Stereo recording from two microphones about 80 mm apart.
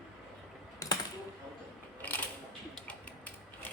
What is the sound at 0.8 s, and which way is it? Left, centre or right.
Typing, left.